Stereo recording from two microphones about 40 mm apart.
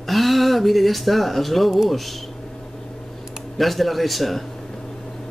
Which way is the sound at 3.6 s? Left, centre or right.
Centre.